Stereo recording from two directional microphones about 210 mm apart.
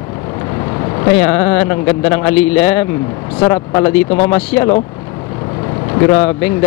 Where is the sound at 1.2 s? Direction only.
15° left (ahead or behind).